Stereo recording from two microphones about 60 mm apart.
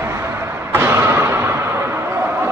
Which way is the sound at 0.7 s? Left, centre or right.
Right.